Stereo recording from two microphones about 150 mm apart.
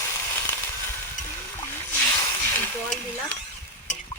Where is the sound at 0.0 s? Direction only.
20° left (ahead or behind).